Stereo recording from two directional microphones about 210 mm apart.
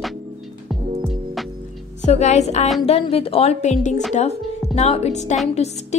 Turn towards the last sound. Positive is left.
turn(degrees=30)  # may be behind; listen again after turning